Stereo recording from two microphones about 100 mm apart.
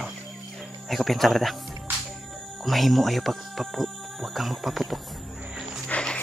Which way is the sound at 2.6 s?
Centre (ahead or behind).